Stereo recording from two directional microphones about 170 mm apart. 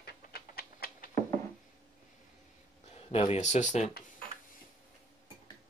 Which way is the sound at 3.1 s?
35° left (ahead or behind).